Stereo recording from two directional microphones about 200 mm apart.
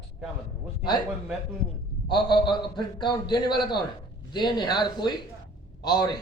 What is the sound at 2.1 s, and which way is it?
Speech, 25° left (ahead or behind).